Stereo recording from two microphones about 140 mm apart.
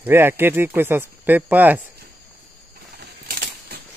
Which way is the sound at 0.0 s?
15° right (ahead or behind).